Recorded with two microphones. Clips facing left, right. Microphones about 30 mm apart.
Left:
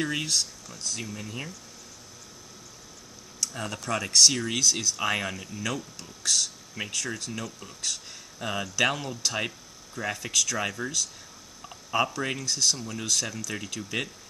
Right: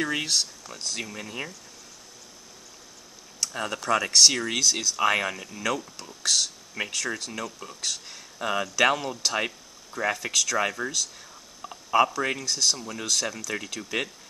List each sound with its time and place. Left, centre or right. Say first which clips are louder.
0.2 s speech: right 2 dB; right
0.7 s speech: right 2 dB; right
1.0 s speech: right 2 dB; right
3.3 s speech: right 3 dB; centre